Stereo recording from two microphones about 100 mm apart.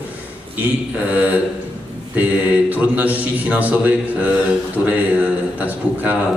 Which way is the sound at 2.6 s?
15° right (ahead or behind).